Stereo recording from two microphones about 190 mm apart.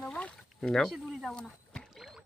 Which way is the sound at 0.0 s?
5° left (ahead or behind).